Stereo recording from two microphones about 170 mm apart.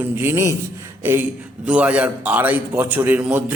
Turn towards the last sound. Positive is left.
turn(degrees=-10)  # may be behind; listen again after turning